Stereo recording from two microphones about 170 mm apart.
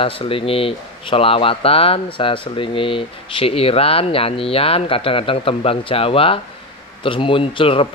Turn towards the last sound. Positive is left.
turn(degrees=30)  # may be behind; listen again after turning